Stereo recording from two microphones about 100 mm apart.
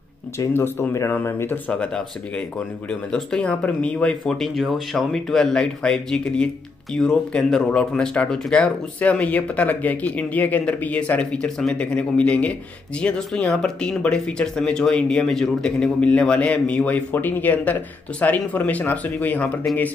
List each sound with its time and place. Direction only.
0.5 s speech: 20° left (ahead or behind)
1.7 s speech: 10° left (ahead or behind)